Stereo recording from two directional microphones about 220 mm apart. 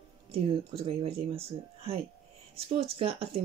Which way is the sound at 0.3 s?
25° right (ahead or behind).